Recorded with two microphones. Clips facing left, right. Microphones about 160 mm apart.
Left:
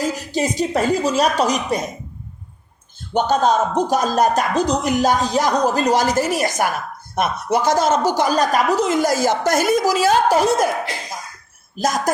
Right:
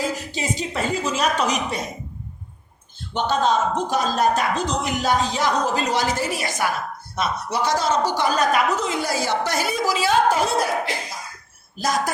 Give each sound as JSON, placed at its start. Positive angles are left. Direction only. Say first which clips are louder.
{"t": 0.0, "sound": "a woman's voice", "louder": "left 5 dB", "side_deg": 40}
{"t": 3.1, "sound": "speech", "louder": "left 4 dB", "side_deg": 45}
{"t": 11.8, "sound": "speech", "louder": "left 4 dB", "side_deg": 45}